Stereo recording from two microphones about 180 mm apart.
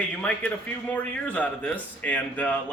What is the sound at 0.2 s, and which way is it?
Speech, 5° left (ahead or behind).